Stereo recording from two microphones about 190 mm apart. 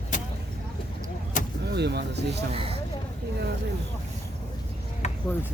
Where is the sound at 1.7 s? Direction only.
60° right (ahead or behind).